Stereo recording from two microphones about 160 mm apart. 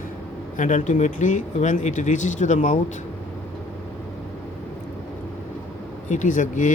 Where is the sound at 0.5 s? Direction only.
55° left (ahead or behind).